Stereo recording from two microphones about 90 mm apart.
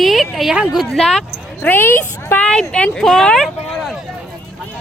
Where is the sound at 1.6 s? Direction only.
25° left (ahead or behind).